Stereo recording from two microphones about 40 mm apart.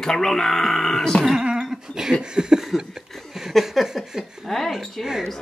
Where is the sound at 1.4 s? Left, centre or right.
Centre.